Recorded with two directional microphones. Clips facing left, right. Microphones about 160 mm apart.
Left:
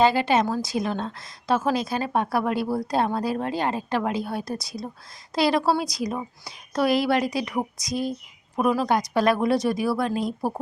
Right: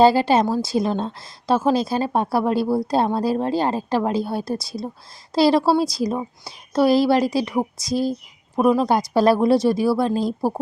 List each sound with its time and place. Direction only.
0.0 s a woman's voice: 35° right (ahead or behind)